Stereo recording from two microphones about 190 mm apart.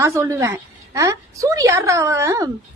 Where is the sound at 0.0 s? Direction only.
15° right (ahead or behind).